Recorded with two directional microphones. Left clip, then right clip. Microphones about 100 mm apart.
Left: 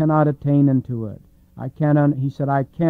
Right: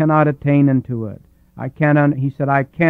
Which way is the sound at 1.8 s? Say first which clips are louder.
Right 4 dB; 50° right (ahead or behind).